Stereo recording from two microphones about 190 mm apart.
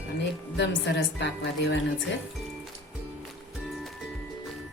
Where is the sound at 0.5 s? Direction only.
65° left (ahead or behind).